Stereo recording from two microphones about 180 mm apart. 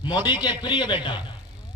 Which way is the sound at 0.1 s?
25° left (ahead or behind).